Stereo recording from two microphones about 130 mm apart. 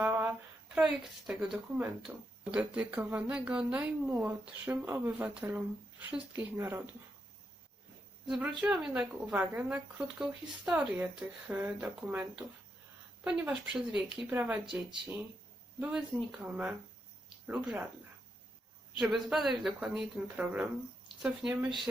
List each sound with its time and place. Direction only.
0.0 s a sound: 15° right (ahead or behind)
1.3 s speech: 5° right (ahead or behind)
8.4 s speech: 5° right (ahead or behind)
15.8 s speech: 10° right (ahead or behind)
17.2 s a sound: 10° right (ahead or behind)
18.9 s speech: centre (ahead or behind)